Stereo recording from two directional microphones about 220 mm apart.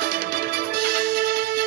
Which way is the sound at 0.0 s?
45° right (ahead or behind).